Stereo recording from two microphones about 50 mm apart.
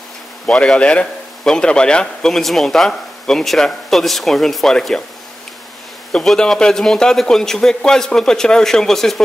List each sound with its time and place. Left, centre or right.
0.5 s a man's voice: centre
0.7 s a man's voice: left
2.2 s speech: centre
6.2 s a man's voice: centre